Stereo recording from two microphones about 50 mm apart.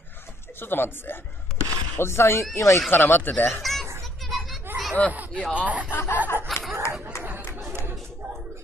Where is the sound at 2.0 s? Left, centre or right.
Left.